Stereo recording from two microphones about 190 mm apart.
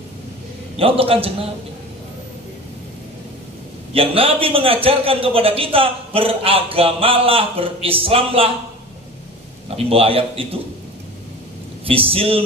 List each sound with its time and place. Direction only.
0.7 s a man's voice: 30° right (ahead or behind)
3.9 s a man's voice: 30° right (ahead or behind)
9.8 s a man's voice: 30° right (ahead or behind)
11.8 s a man's voice: 30° right (ahead or behind)